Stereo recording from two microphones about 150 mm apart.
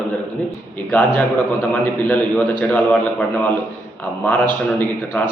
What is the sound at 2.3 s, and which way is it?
Speech, 10° left (ahead or behind).